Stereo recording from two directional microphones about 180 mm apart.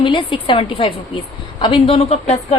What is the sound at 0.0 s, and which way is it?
A woman's voice, 25° left (ahead or behind).